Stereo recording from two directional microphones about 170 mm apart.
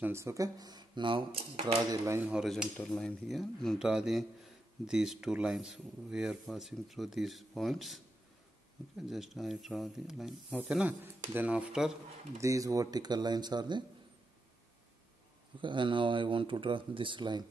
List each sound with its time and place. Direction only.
0.0 s speech: 15° right (ahead or behind)
1.9 s speech: 15° right (ahead or behind)
12.4 s speech: 20° right (ahead or behind)
15.6 s speech: 30° right (ahead or behind)